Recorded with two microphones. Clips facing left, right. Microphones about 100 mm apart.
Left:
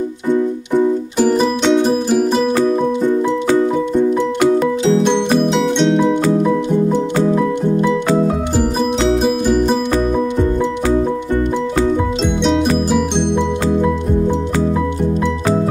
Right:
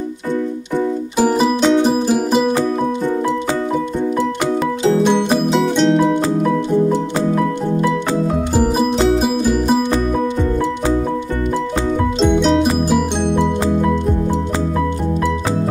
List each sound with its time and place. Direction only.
1.1 s music: 5° right (ahead or behind)
4.8 s music: 5° right (ahead or behind)
8.5 s music: 5° right (ahead or behind)
12.2 s music: centre (ahead or behind)